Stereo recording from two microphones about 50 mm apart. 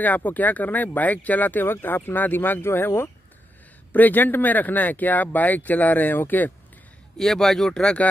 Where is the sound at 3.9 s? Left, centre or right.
Left.